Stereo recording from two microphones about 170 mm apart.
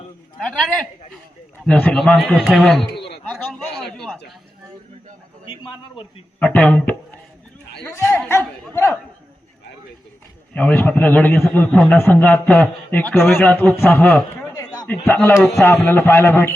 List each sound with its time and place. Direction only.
0.3 s a man's voice: centre (ahead or behind)
2.8 s a sound: 80° left
3.2 s a sound: 5° left (ahead or behind)
5.5 s a man's voice: 30° left (ahead or behind)
6.4 s a man's voice: 10° left (ahead or behind)
10.5 s a man's voice: 10° left (ahead or behind)